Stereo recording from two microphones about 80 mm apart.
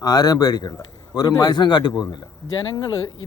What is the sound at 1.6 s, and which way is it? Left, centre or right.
Speech, left.